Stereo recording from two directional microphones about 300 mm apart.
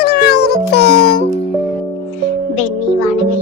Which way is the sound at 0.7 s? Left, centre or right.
Left.